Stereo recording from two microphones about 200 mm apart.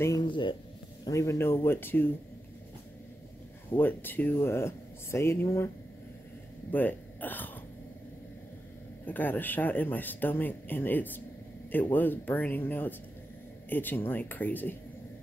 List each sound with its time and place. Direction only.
0.0 s speech: 20° left (ahead or behind)
3.7 s speech: 10° left (ahead or behind)
6.7 s speech: 10° left (ahead or behind)
9.0 s speech: 10° left (ahead or behind)